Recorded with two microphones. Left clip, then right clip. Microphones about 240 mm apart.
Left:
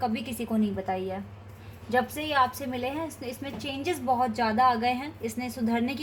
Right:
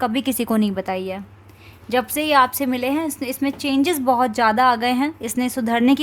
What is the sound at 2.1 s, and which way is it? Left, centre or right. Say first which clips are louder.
A woman's voice: right 9 dB; right.